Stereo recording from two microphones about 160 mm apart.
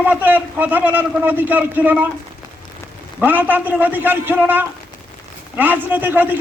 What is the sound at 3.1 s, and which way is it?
A man's voice, 10° right (ahead or behind).